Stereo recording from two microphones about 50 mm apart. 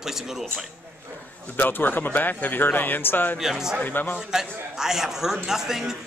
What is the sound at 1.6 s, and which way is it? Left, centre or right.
A man's voice, left.